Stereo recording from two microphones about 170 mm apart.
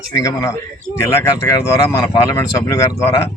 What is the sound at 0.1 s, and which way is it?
Speech, 20° left (ahead or behind).